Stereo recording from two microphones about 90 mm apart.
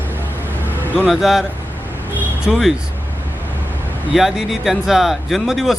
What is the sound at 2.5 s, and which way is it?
Speech, centre (ahead or behind).